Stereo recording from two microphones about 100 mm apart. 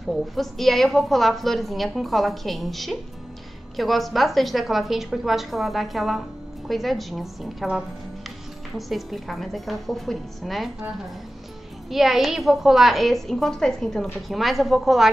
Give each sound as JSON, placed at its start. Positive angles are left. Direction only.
{"t": 0.0, "sound": "a woman's voice", "side_deg": 0}
{"t": 11.9, "sound": "a woman's voice", "side_deg": 0}